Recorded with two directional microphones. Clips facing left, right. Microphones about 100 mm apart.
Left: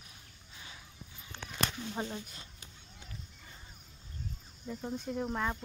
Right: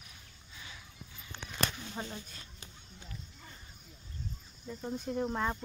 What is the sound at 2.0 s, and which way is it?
Speech, 15° left (ahead or behind).